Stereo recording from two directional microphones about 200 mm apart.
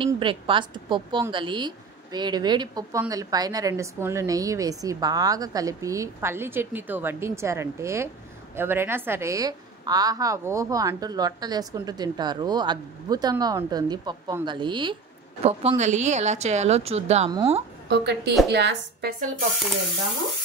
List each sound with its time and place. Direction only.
0.0 s a woman's voice: 25° right (ahead or behind)
17.8 s a woman's voice: 55° right (ahead or behind)